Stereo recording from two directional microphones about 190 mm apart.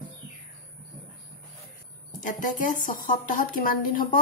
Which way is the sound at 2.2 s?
45° left (ahead or behind).